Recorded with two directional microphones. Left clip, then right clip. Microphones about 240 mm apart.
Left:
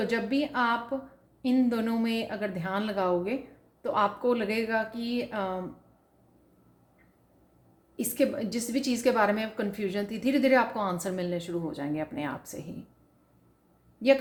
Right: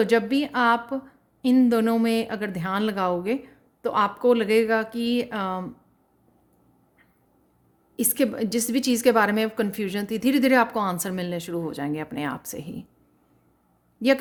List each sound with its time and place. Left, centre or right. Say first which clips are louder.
0.0 s a woman's voice: right 7 dB; right
7.9 s a woman's voice: right 3 dB; right